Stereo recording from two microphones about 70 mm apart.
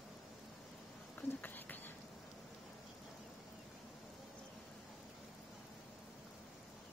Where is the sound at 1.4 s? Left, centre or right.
Left.